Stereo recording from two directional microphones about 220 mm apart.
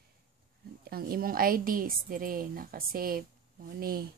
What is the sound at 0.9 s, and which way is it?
A woman's voice, 45° right (ahead or behind).